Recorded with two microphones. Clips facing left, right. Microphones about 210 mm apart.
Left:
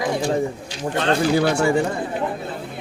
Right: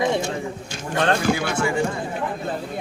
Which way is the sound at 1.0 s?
50° right (ahead or behind).